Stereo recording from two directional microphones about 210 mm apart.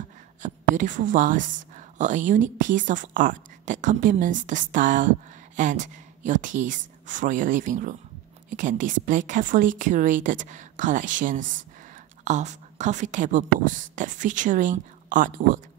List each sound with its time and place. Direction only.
0.4 s a woman's voice: 35° right (ahead or behind)